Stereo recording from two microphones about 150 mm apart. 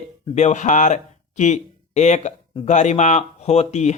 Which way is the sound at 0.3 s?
50° left (ahead or behind).